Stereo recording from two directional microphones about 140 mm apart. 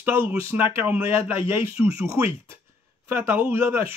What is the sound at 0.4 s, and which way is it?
A man's voice, 15° right (ahead or behind).